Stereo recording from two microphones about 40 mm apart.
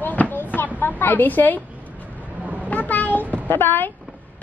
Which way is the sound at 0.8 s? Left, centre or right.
Left.